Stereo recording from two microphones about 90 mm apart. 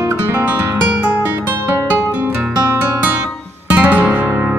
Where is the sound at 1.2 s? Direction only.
25° right (ahead or behind).